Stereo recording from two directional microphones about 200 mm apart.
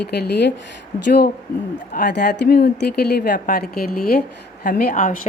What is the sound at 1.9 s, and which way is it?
A woman's voice, 55° left (ahead or behind).